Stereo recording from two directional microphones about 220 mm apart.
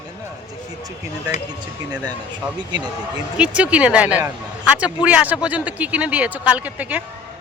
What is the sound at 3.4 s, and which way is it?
Speech, 5° right (ahead or behind).